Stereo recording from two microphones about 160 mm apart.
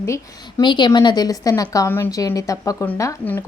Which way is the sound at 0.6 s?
30° left (ahead or behind).